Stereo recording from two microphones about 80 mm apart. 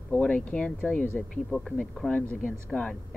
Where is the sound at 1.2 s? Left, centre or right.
Centre.